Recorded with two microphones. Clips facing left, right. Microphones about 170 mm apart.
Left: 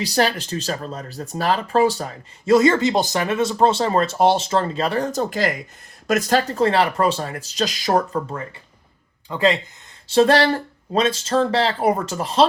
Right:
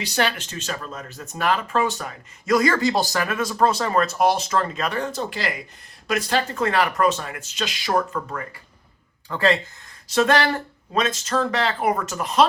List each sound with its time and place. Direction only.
0.0 s speech: 35° left (ahead or behind)
9.3 s speech: 20° left (ahead or behind)
10.1 s speech: 30° left (ahead or behind)